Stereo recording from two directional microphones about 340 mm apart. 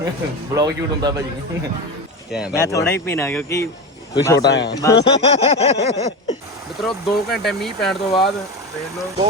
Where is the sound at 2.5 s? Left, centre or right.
Centre.